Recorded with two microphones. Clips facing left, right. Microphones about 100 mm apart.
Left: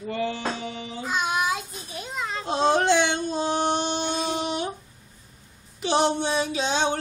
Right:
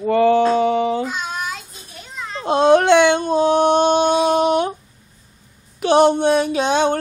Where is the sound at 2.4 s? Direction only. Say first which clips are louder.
Right 9 dB; 60° right (ahead or behind).